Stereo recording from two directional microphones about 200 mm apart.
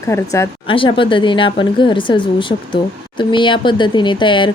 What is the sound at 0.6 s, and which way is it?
Speech, 25° left (ahead or behind).